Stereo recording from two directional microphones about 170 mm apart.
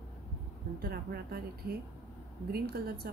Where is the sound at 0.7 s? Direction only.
65° right (ahead or behind).